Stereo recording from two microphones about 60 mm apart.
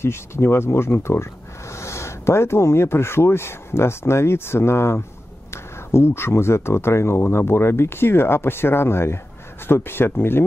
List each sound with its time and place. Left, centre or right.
0.0 s speech: left